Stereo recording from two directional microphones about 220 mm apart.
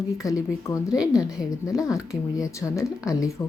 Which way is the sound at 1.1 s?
5° right (ahead or behind).